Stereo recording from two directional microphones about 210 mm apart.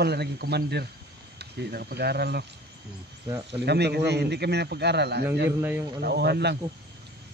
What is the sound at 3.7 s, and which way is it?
Speech, 50° right (ahead or behind).